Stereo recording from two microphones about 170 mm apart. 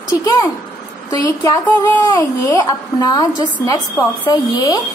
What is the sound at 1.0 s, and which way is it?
A woman's voice, 20° left (ahead or behind).